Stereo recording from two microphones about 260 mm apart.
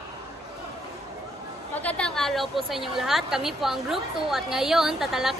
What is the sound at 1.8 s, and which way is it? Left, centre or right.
A woman's voice, centre.